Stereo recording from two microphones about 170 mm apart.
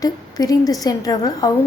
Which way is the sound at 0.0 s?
20° left (ahead or behind).